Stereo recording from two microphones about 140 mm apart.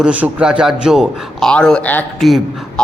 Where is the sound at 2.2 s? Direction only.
Centre (ahead or behind).